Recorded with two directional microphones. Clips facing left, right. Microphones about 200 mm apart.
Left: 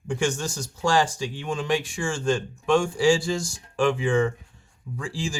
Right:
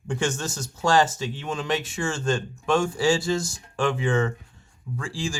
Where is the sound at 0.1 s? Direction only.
10° left (ahead or behind).